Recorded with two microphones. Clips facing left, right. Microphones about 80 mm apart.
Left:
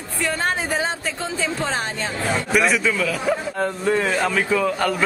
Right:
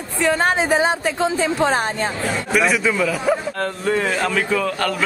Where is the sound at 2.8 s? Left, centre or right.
Centre.